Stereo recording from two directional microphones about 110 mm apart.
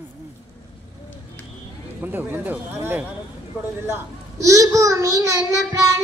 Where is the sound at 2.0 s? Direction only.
15° right (ahead or behind).